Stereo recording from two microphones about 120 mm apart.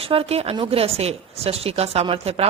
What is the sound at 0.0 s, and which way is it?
A woman's voice, 50° right (ahead or behind).